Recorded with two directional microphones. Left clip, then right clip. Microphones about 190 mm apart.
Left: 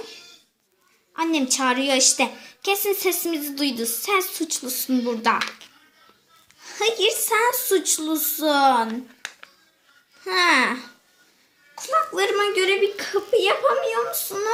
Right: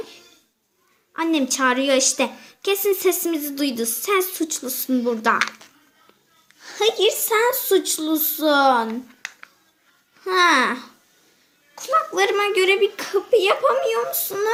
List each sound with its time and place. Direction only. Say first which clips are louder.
1.1 s a woman's voice: right 1 dB; 5° right (ahead or behind)
5.4 s speech: right 4 dB; 30° right (ahead or behind)
6.6 s a woman's voice: right 2 dB; 10° right (ahead or behind)
10.2 s a woman's voice: right 2 dB; 5° right (ahead or behind)